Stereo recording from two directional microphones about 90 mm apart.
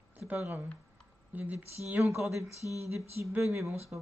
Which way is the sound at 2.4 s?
35° left (ahead or behind).